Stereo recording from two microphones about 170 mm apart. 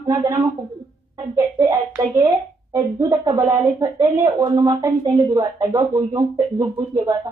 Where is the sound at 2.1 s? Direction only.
20° right (ahead or behind).